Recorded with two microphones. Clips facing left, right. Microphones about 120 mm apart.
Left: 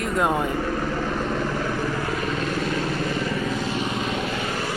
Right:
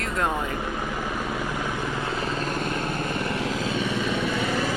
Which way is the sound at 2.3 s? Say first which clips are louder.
Left 2 dB; 45° right (ahead or behind).